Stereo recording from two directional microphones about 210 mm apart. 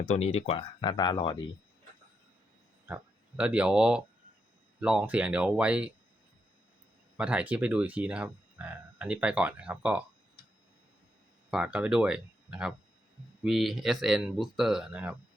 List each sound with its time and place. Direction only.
0.1 s speech: 30° left (ahead or behind)
2.8 s speech: 5° right (ahead or behind)
7.2 s speech: 5° right (ahead or behind)
11.5 s speech: 5° right (ahead or behind)